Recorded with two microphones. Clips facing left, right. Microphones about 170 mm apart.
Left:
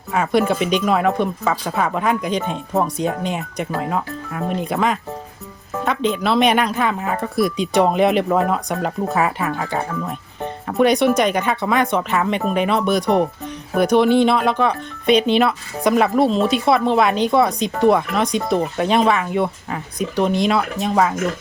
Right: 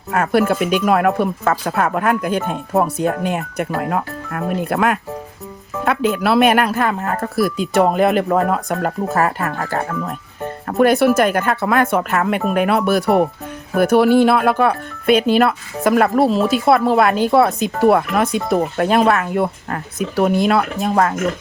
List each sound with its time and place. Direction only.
0.1 s speech: 5° right (ahead or behind)
3.8 s speech: 60° right (ahead or behind)
4.7 s speech: 5° right (ahead or behind)